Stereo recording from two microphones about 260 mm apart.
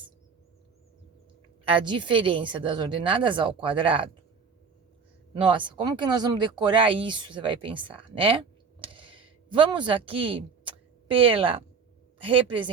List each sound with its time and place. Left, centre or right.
1.6 s a woman's voice: centre
5.5 s a woman's voice: centre